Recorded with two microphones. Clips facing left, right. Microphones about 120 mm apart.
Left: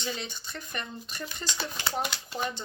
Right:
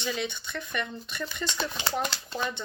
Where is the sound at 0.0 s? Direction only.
35° left (ahead or behind).